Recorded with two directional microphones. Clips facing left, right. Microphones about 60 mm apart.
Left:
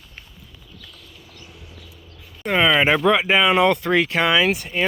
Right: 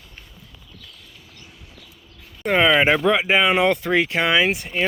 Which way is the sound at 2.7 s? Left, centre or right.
Centre.